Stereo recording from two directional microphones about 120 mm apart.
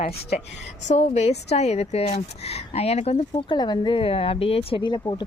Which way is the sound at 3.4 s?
40° left (ahead or behind).